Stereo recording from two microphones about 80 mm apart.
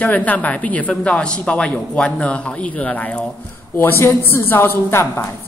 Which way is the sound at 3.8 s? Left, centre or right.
Left.